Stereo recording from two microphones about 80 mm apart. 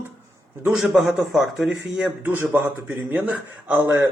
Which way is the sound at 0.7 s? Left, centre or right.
Centre.